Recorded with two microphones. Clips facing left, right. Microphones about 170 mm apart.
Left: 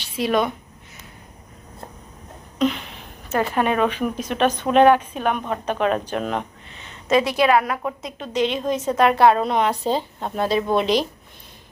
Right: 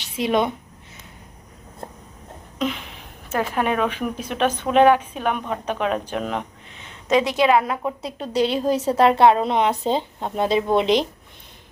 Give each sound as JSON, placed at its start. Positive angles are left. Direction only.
{"t": 0.0, "sound": "speech", "side_deg": -20}
{"t": 2.6, "sound": "a sound", "side_deg": -5}
{"t": 3.2, "sound": "speech", "side_deg": -5}
{"t": 7.1, "sound": "a woman's voice", "side_deg": -15}
{"t": 7.9, "sound": "a woman's voice", "side_deg": -35}